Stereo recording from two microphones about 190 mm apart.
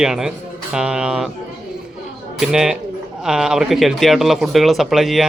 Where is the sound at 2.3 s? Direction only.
5° right (ahead or behind).